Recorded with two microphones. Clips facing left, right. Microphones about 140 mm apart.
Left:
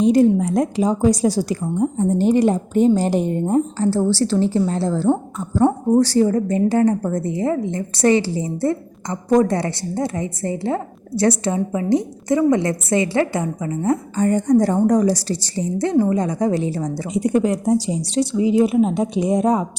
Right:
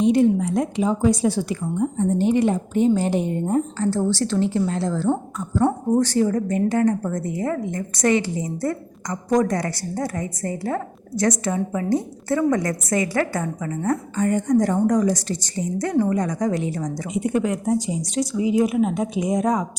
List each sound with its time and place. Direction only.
0.0 s a woman's voice: 40° left (ahead or behind)
11.7 s a woman's voice: 20° left (ahead or behind)
14.2 s a woman's voice: 35° left (ahead or behind)